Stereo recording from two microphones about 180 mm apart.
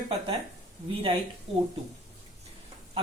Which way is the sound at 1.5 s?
35° right (ahead or behind).